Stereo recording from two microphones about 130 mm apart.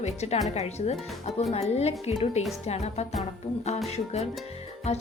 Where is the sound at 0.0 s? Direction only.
60° left (ahead or behind).